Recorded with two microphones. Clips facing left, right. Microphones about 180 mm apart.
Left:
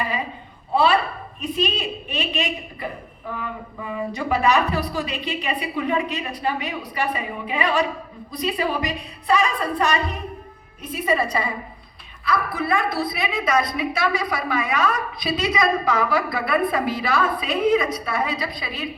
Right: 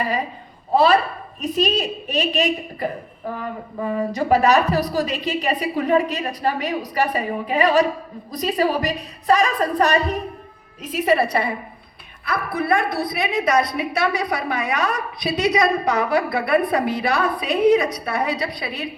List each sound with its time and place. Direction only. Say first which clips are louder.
0.7 s a woman's voice: right 3 dB; 40° right (ahead or behind)
10.8 s a woman's voice: right 4 dB; 85° right; by 18.9 s 60° right (ahead or behind)